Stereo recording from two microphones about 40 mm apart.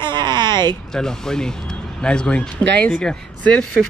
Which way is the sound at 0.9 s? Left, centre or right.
Centre.